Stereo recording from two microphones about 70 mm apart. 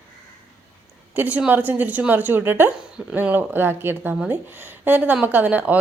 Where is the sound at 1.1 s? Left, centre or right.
Right.